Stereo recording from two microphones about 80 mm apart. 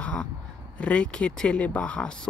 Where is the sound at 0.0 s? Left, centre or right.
Centre.